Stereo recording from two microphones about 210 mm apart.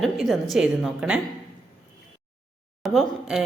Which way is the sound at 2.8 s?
Centre (ahead or behind).